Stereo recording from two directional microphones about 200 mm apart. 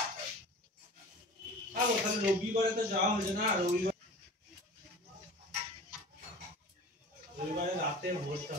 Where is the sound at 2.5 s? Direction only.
45° right (ahead or behind).